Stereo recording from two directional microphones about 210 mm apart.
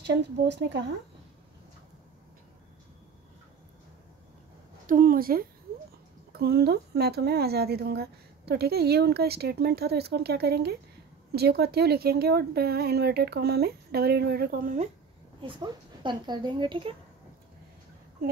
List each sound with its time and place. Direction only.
0.0 s speech: 55° right (ahead or behind)
4.8 s speech: 40° right (ahead or behind)
15.4 s speech: 25° right (ahead or behind)